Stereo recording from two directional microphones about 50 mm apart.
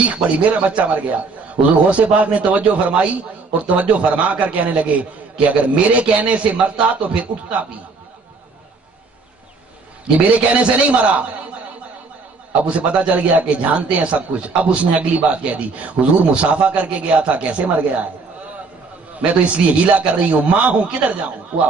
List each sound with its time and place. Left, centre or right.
0.0 s a man's voice: right
10.0 s a man's voice: right
12.6 s a man's voice: right
19.4 s a man's voice: right